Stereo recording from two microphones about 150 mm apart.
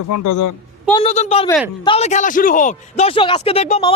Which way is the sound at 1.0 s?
45° left (ahead or behind).